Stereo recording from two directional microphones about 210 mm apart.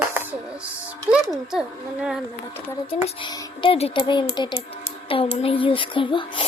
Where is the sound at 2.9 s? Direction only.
25° left (ahead or behind).